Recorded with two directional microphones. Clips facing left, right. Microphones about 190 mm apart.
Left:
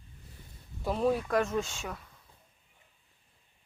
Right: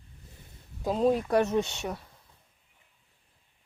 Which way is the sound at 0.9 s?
20° right (ahead or behind).